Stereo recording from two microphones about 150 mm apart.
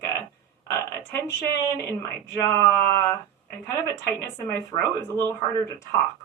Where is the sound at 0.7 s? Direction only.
20° left (ahead or behind).